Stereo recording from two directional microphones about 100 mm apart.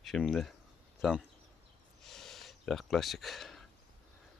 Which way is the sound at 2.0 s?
5° left (ahead or behind).